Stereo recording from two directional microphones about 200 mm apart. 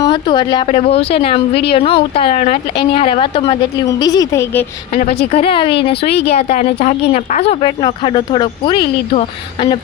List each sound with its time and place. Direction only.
0.0 s speech: 20° left (ahead or behind)
4.9 s speech: 30° left (ahead or behind)
6.1 s speech: 55° left (ahead or behind)
6.3 s speech: 30° left (ahead or behind)